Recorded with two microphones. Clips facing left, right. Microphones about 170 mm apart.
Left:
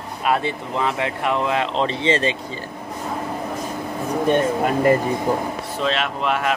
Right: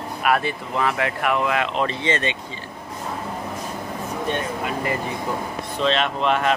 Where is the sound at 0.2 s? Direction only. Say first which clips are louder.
Even; 25° left (ahead or behind).